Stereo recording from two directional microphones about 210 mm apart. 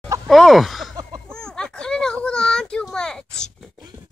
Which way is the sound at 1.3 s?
5° left (ahead or behind).